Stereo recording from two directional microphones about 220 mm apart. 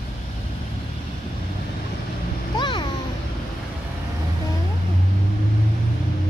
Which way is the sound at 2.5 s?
20° left (ahead or behind).